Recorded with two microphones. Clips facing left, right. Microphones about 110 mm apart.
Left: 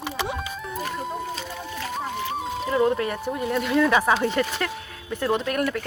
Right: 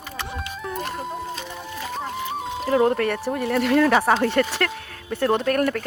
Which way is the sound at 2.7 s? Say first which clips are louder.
Right 3 dB; 40° right (ahead or behind).